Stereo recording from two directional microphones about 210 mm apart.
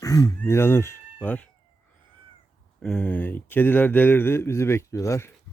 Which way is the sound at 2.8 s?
5° left (ahead or behind).